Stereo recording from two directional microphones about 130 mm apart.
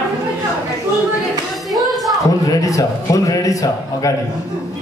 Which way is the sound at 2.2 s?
25° left (ahead or behind).